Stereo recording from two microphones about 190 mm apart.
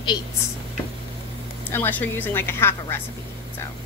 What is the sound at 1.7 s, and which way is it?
A woman's voice, 10° left (ahead or behind).